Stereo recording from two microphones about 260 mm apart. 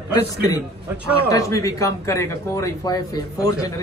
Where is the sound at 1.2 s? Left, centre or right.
Centre.